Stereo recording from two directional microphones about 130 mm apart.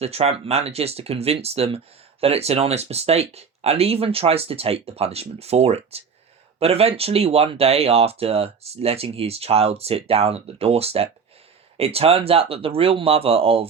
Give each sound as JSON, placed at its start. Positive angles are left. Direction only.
{"t": 0.0, "sound": "speech", "side_deg": -50}